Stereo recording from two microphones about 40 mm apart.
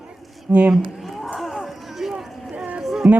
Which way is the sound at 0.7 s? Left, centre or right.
Centre.